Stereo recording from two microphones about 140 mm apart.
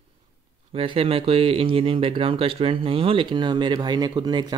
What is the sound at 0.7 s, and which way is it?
Speech, 40° right (ahead or behind).